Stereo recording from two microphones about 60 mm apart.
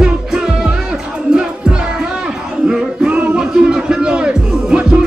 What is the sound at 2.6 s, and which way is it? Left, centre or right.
Music, centre.